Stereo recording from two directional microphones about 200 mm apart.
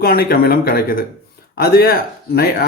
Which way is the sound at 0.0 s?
50° left (ahead or behind).